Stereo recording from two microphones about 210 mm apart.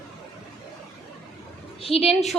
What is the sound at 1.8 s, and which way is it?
Speech, 25° left (ahead or behind).